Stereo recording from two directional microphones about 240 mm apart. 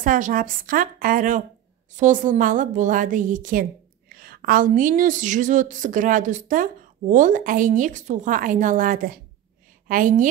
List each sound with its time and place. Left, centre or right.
0.0 s a woman's voice: right